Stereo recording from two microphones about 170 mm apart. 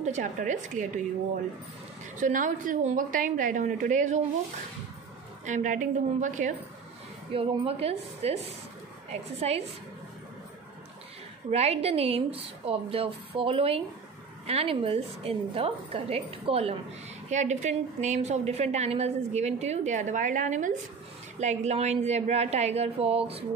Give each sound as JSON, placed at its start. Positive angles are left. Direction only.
{"t": 0.0, "sound": "a woman's voice", "side_deg": -45}
{"t": 2.1, "sound": "a woman's voice", "side_deg": -50}
{"t": 5.4, "sound": "a woman's voice", "side_deg": -45}
{"t": 7.3, "sound": "a woman's voice", "side_deg": -35}
{"t": 11.5, "sound": "a woman's voice", "side_deg": -35}